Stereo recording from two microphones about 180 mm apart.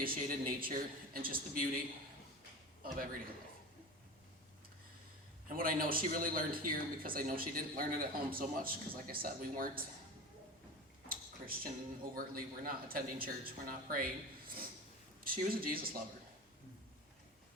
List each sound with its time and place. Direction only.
0.0 s speech: 50° right (ahead or behind)
2.8 s speech: 50° right (ahead or behind)
5.5 s speech: 50° right (ahead or behind)
11.1 s a sound: 55° right (ahead or behind)
12.1 s speech: 55° right (ahead or behind)